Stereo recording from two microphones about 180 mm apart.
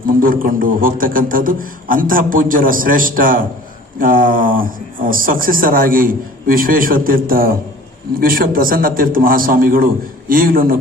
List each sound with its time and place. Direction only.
0.0 s speech: 50° right (ahead or behind)